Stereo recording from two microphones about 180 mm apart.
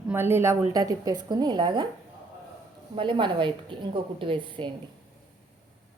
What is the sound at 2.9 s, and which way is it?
A woman's voice, 25° right (ahead or behind).